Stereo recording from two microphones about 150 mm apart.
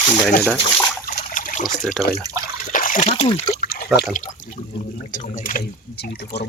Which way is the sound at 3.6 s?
80° left.